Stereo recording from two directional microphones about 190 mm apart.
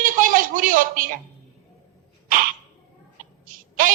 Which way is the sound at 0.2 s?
45° right (ahead or behind).